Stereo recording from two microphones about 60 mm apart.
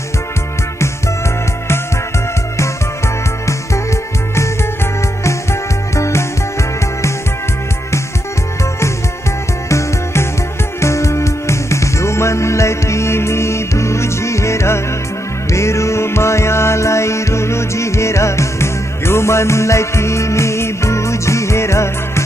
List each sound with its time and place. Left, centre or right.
5.2 s music: left
9.7 s music: left